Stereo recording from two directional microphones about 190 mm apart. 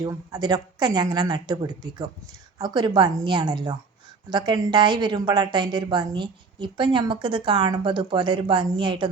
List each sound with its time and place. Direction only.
0.0 s a woman's voice: 20° right (ahead or behind)